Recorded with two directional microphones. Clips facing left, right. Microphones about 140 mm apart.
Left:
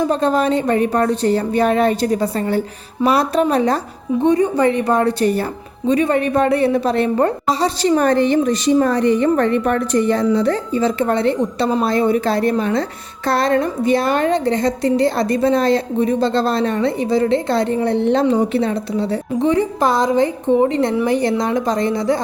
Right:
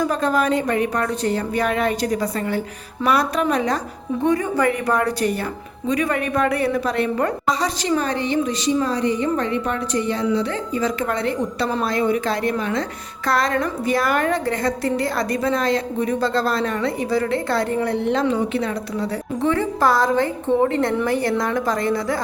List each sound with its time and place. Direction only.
0.0 s a woman's voice: 25° left (ahead or behind)
7.9 s a woman's voice: 50° left (ahead or behind)
10.8 s a woman's voice: 30° left (ahead or behind)